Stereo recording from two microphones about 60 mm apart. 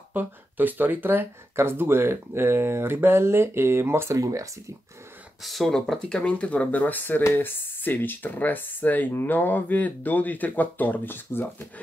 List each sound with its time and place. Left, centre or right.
0.1 s speech: right
4.1 s speech: right
5.4 s speech: centre; by 11.4 s left